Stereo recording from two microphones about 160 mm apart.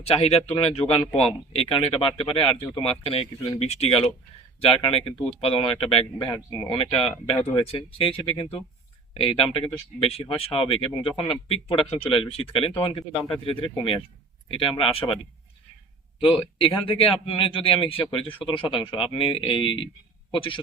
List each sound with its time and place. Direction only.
0.0 s speech: 40° left (ahead or behind)
16.6 s speech: 35° left (ahead or behind)